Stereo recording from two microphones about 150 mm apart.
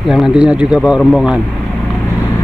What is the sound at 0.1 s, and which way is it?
A man's voice, 5° right (ahead or behind).